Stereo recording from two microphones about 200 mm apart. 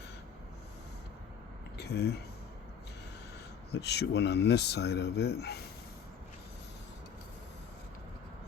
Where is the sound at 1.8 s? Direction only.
55° left (ahead or behind).